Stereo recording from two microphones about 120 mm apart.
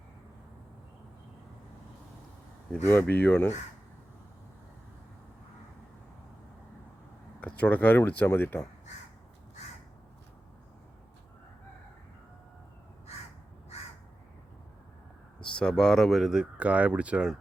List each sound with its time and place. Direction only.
2.8 s speech: 20° left (ahead or behind)
7.4 s speech: 10° left (ahead or behind)
15.4 s speech: 10° left (ahead or behind)